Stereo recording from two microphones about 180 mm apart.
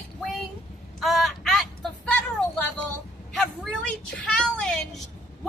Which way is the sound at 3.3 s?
5° left (ahead or behind).